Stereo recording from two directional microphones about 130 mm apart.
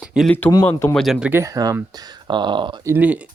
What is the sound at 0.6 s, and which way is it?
Speech, 20° left (ahead or behind).